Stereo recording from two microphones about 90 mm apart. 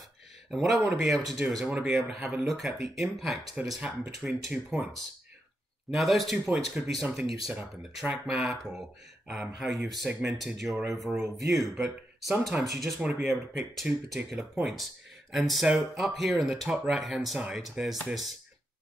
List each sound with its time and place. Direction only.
0.5 s speech: centre (ahead or behind)
5.9 s speech: centre (ahead or behind)